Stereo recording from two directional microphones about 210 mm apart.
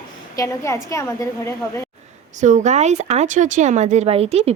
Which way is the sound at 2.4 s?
35° right (ahead or behind).